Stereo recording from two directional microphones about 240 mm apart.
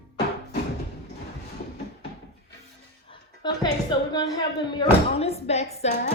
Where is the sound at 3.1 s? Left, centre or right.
Centre.